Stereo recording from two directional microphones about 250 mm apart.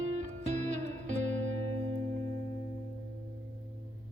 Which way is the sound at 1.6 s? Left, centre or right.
Right.